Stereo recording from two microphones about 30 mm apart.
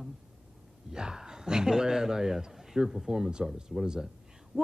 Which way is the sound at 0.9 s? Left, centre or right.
Right.